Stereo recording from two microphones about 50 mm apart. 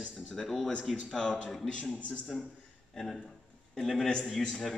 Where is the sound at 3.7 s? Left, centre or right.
Centre.